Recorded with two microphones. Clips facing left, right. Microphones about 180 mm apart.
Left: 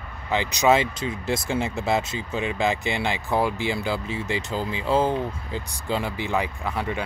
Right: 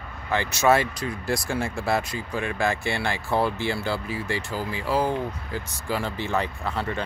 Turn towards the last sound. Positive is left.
turn(degrees=15)  # may be behind; listen again after turning